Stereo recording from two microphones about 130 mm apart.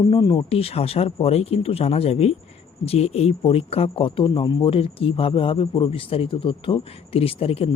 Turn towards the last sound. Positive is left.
turn(degrees=50)  # may be behind; listen again after turning